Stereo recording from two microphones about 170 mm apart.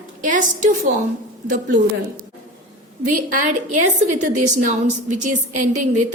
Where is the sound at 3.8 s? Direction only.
45° right (ahead or behind).